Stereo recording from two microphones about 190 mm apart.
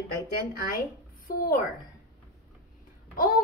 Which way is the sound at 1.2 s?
50° left (ahead or behind).